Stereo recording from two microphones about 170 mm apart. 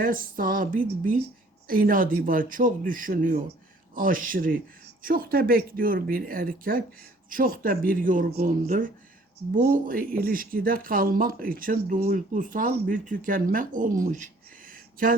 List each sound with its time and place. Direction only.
0.0 s speech: 55° right (ahead or behind)